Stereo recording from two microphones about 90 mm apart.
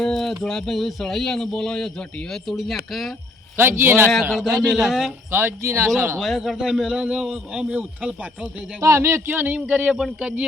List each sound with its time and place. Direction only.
0.0 s a sound: 5° left (ahead or behind)
0.4 s a man's voice: 5° left (ahead or behind)
3.6 s speech: 25° right (ahead or behind)
4.1 s a man's voice: centre (ahead or behind)
5.3 s speech: 25° right (ahead or behind)
6.1 s a man's voice: centre (ahead or behind)
8.8 s a man's voice: 30° right (ahead or behind); by 10.4 s 10° right (ahead or behind)